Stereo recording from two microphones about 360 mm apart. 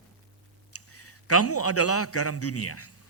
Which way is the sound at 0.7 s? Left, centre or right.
Left.